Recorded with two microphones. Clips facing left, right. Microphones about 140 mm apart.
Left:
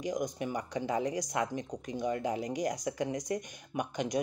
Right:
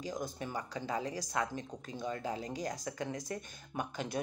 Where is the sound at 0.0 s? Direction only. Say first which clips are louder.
Left 6 dB; 15° left (ahead or behind).